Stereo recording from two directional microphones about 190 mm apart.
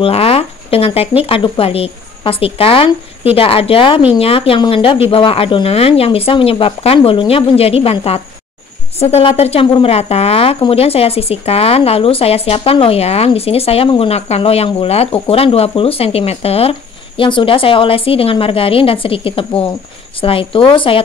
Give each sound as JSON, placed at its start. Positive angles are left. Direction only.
{"t": 0.0, "sound": "a woman's voice", "side_deg": 30}